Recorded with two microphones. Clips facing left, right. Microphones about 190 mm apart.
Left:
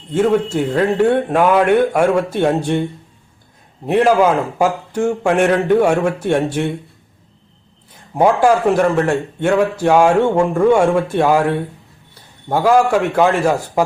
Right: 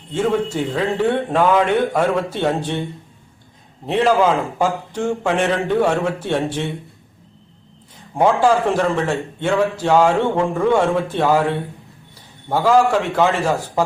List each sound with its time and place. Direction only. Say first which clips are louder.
0.1 s a man's voice: left 4 dB; 10° left (ahead or behind)
3.8 s a man's voice: left 3 dB; 10° left (ahead or behind)
8.1 s a man's voice: left 2 dB; 10° left (ahead or behind)